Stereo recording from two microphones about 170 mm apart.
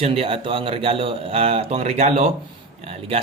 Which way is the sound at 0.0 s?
35° right (ahead or behind).